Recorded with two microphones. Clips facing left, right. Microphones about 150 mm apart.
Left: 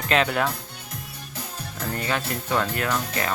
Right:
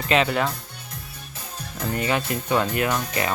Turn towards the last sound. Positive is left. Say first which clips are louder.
# right 2 dB
turn(degrees=-10)  # may be behind; listen again after turning